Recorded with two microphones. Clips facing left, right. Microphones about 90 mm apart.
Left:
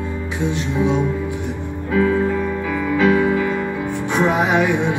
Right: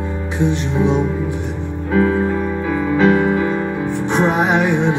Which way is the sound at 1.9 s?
30° right (ahead or behind).